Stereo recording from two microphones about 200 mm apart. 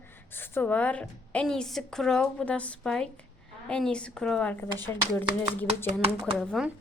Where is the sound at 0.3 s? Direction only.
10° left (ahead or behind).